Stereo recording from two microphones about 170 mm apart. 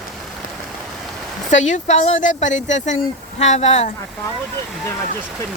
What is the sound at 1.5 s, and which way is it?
Speech, 45° left (ahead or behind).